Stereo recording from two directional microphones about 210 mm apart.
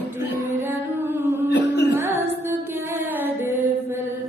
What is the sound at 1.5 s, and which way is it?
Music, 55° left (ahead or behind).